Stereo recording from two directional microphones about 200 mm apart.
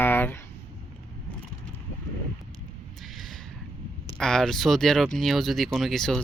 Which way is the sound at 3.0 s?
Centre (ahead or behind).